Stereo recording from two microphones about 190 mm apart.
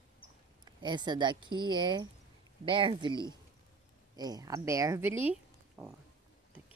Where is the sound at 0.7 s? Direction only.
25° right (ahead or behind); by 5.9 s 5° right (ahead or behind).